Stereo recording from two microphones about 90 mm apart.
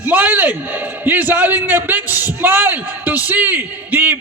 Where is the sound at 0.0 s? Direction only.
20° right (ahead or behind).